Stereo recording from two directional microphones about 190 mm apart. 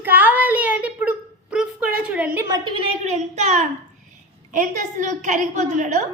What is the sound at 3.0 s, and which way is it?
A woman's voice, 35° right (ahead or behind).